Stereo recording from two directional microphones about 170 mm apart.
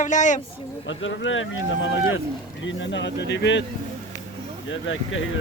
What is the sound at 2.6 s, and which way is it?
Speech, 90° left.